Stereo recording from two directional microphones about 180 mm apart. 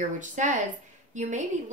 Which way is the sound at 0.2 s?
45° right (ahead or behind).